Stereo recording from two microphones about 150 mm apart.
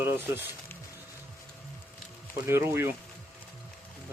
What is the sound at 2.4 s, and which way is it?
Speech, 15° right (ahead or behind).